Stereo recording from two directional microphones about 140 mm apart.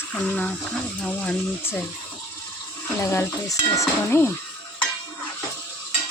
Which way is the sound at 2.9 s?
20° left (ahead or behind).